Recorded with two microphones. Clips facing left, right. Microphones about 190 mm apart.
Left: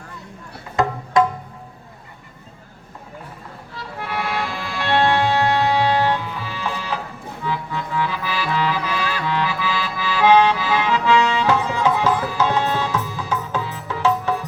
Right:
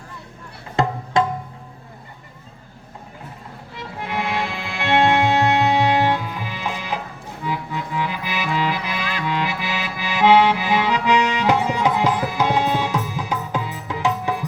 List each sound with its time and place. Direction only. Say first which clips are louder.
3.8 s music: right 1 dB; 20° right (ahead or behind)